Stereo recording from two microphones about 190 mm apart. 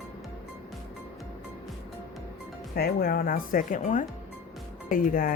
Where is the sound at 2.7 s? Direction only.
50° left (ahead or behind).